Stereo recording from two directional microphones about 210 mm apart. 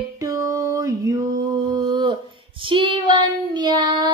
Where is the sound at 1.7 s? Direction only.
20° right (ahead or behind).